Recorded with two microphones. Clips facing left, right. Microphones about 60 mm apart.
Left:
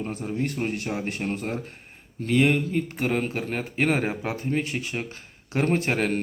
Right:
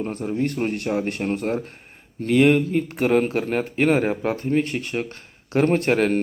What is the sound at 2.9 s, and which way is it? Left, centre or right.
Speech, centre.